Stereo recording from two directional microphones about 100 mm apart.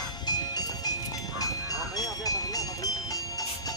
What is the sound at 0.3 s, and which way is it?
Music, 40° left (ahead or behind).